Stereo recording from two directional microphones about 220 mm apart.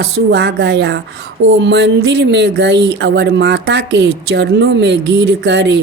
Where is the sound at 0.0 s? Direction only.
50° right (ahead or behind).